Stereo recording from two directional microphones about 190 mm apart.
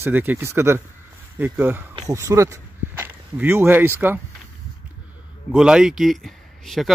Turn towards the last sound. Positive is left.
turn(degrees=0)  # may be behind; listen again after turning